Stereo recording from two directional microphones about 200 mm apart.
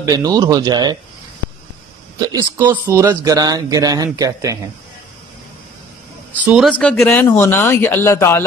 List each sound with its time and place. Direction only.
0.0 s speech: 20° right (ahead or behind)
2.1 s speech: 20° right (ahead or behind)
6.4 s speech: centre (ahead or behind)